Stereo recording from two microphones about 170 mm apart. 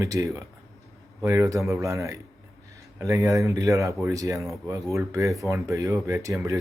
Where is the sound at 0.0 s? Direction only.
20° right (ahead or behind).